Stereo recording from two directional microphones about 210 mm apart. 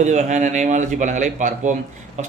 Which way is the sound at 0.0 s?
35° right (ahead or behind).